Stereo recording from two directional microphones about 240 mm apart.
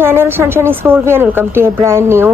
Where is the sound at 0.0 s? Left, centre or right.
Centre.